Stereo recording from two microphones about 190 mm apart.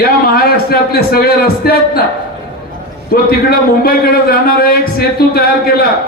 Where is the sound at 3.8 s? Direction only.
50° left (ahead or behind).